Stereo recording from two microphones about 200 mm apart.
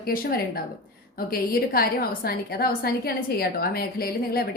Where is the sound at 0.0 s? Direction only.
50° left (ahead or behind).